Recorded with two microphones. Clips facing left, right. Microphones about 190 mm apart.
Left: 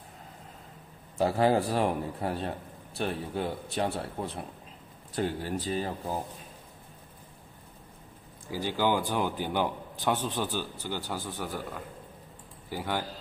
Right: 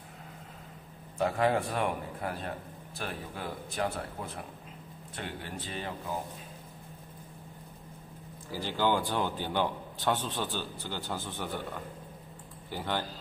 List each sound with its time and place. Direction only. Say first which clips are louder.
1.1 s a man's voice: left 3 dB; 35° left (ahead or behind)
8.5 s a man's voice: left 2 dB; 15° left (ahead or behind)
12.6 s speech: left 1 dB; 10° left (ahead or behind)